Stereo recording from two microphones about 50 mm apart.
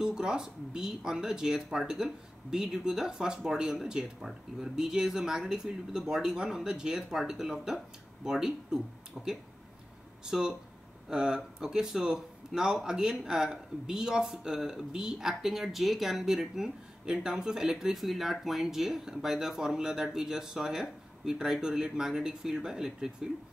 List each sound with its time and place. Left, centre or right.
0.0 s speech: centre